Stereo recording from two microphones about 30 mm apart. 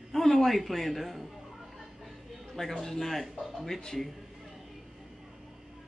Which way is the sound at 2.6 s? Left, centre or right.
Centre.